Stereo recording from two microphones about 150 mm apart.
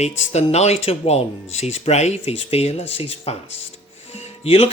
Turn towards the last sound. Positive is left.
turn(degrees=40)  # may be behind; listen again after turning